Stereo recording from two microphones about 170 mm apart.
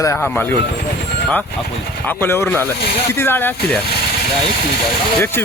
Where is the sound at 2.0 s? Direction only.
15° left (ahead or behind).